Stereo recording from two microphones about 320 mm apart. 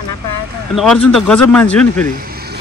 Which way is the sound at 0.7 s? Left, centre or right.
Centre.